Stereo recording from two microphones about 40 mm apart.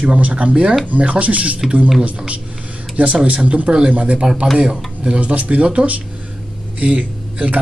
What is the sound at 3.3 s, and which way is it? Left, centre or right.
Speech, right.